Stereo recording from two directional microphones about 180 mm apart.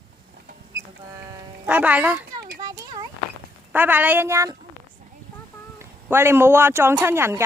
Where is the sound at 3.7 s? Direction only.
10° right (ahead or behind).